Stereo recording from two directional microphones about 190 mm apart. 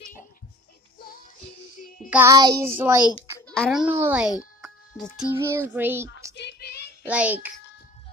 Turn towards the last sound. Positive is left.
turn(degrees=-10)  # may be behind; listen again after turning